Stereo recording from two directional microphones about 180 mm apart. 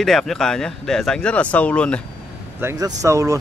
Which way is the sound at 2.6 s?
20° right (ahead or behind).